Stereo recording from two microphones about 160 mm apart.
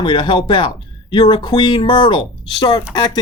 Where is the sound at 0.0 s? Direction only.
30° left (ahead or behind).